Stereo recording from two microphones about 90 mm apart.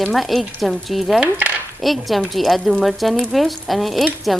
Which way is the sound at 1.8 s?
Centre (ahead or behind).